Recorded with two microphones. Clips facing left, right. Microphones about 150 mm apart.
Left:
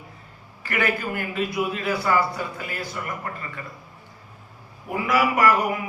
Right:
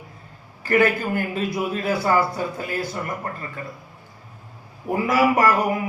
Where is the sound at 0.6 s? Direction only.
40° right (ahead or behind).